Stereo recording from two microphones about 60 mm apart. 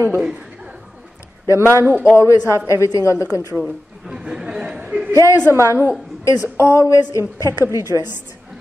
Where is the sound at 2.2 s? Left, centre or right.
Left.